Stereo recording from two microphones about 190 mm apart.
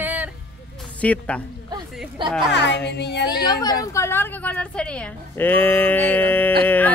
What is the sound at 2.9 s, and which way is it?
Speech, 60° left (ahead or behind).